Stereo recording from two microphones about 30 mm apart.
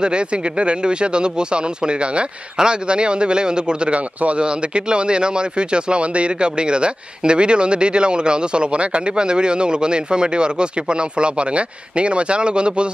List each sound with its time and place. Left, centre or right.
0.0 s speech: right